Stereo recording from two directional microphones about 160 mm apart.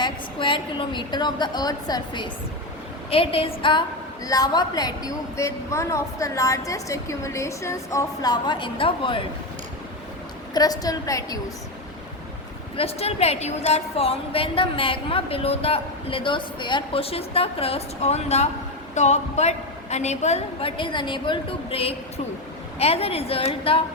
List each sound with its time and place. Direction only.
0.0 s a woman's voice: 30° left (ahead or behind)
10.5 s a woman's voice: 25° left (ahead or behind)
12.7 s a woman's voice: 40° left (ahead or behind)